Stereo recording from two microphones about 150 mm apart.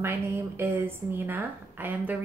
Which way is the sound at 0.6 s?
15° right (ahead or behind).